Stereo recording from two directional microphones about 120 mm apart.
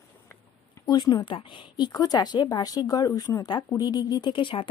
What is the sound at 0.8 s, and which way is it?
Speech, 35° left (ahead or behind).